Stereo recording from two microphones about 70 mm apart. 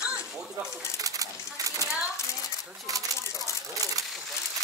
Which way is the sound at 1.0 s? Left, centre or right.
Right.